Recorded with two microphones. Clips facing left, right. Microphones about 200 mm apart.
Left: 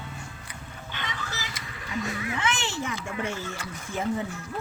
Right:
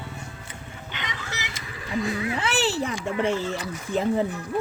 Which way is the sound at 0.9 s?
20° right (ahead or behind).